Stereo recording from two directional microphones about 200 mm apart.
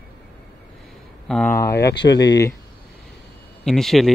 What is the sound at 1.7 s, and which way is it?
Speech, 55° left (ahead or behind).